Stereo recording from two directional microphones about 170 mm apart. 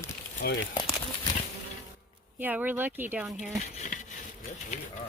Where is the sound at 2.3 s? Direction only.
10° right (ahead or behind).